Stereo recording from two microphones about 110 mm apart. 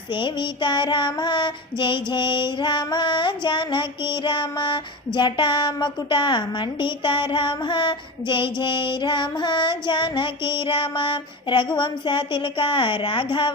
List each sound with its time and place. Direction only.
0.1 s child singing: 45° left (ahead or behind)